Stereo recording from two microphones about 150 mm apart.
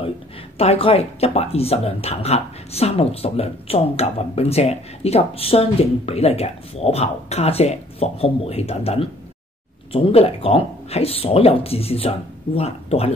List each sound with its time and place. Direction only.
0.6 s speech: 40° left (ahead or behind)
10.1 s speech: 40° left (ahead or behind)